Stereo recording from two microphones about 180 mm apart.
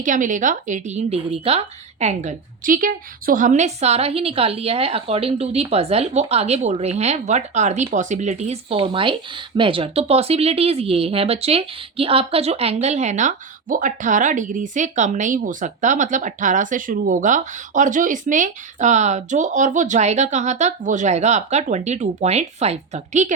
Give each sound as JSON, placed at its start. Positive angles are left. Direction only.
{"t": 0.0, "sound": "speech", "side_deg": -45}
{"t": 8.7, "sound": "speech", "side_deg": -30}